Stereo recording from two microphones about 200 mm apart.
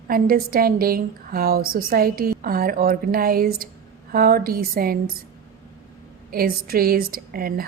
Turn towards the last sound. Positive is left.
turn(degrees=-50)  # may be behind; listen again after turning